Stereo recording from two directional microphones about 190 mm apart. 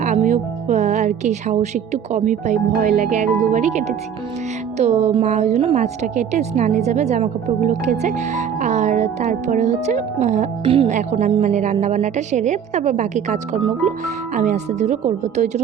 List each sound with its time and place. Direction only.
0.0 s speech: 40° right (ahead or behind)